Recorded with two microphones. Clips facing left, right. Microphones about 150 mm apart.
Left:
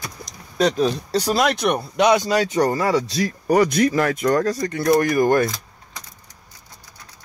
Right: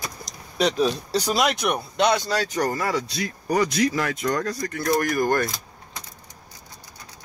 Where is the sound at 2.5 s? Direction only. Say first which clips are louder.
Left 5 dB; 25° left (ahead or behind).